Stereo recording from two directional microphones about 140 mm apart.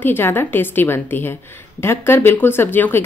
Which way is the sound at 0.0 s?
15° left (ahead or behind).